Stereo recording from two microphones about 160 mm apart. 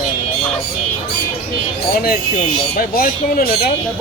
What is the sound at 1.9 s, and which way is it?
A man's voice, 65° left (ahead or behind).